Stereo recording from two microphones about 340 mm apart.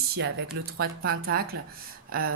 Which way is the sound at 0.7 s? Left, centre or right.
Right.